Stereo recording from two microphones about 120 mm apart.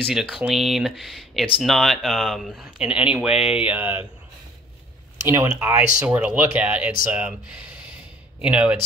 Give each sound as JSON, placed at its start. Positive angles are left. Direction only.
{"t": 0.1, "sound": "speech", "side_deg": -5}
{"t": 5.2, "sound": "speech", "side_deg": -20}
{"t": 8.4, "sound": "speech", "side_deg": -10}